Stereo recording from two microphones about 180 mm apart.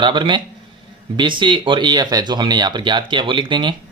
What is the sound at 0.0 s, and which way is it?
Speech, 25° right (ahead or behind).